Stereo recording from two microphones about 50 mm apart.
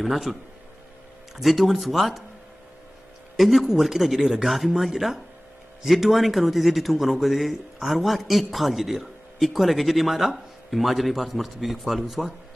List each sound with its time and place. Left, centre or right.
0.0 s a man's voice: centre
3.3 s a man's voice: centre